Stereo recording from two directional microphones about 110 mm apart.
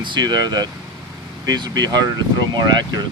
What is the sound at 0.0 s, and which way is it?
Speech, 40° right (ahead or behind).